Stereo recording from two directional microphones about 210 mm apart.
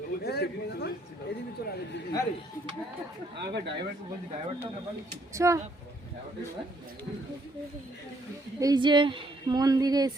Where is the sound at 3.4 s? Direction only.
55° right (ahead or behind).